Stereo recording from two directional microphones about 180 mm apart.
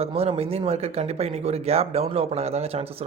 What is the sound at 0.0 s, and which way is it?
Speech, 35° right (ahead or behind).